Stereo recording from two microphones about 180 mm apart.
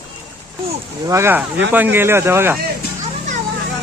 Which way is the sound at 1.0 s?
15° right (ahead or behind).